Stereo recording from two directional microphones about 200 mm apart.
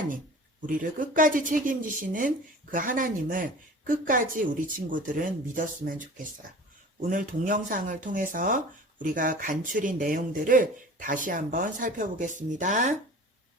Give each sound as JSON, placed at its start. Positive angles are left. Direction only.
{"t": 0.7, "sound": "a woman's voice", "side_deg": -40}